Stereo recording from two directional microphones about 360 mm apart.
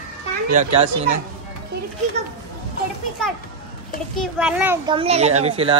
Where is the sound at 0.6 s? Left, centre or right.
Centre.